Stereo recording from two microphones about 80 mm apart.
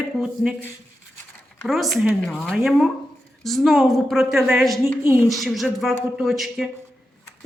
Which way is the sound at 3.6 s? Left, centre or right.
Centre.